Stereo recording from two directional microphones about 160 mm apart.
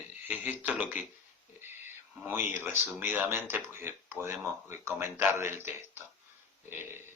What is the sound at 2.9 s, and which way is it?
Speech, 10° right (ahead or behind).